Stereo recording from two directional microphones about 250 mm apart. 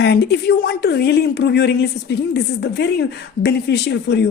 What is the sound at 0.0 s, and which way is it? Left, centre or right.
Speech, left.